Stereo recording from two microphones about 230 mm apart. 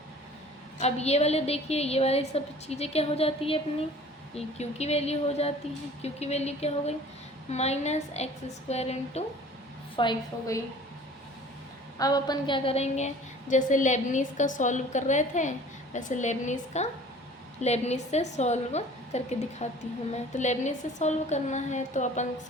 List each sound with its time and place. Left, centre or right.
0.8 s a woman's voice: left
11.9 s a woman's voice: centre; by 22.3 s left